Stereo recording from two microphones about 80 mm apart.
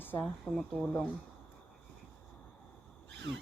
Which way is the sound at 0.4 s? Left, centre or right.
Centre.